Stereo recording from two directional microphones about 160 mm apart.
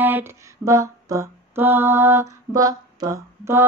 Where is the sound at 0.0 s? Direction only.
15° right (ahead or behind).